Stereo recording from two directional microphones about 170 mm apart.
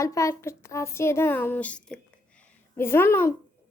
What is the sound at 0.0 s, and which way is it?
Speech, 20° left (ahead or behind).